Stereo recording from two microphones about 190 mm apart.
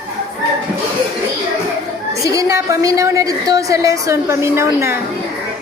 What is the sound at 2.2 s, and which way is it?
A woman's voice, 15° right (ahead or behind).